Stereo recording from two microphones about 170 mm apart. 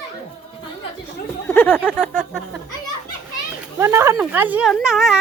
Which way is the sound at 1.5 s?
10° left (ahead or behind).